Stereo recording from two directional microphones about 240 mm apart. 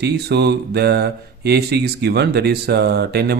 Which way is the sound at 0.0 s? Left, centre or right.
Right.